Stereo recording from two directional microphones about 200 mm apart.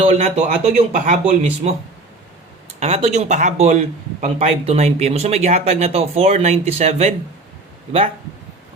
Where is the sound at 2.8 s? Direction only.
30° right (ahead or behind).